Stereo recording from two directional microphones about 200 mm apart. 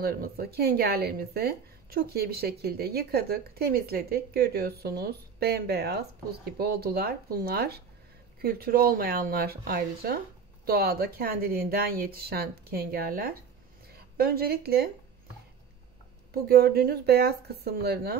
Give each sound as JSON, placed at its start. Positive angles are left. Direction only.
{"t": 0.0, "sound": "a woman's voice", "side_deg": -50}
{"t": 16.4, "sound": "speech", "side_deg": -50}